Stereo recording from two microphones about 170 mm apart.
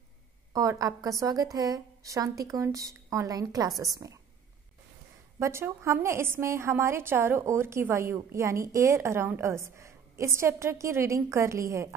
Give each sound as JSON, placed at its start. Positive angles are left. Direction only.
{"t": 0.5, "sound": "a woman's voice", "side_deg": -20}
{"t": 5.4, "sound": "a woman's voice", "side_deg": -15}